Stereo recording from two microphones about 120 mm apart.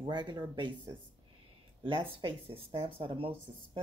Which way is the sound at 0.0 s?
40° right (ahead or behind).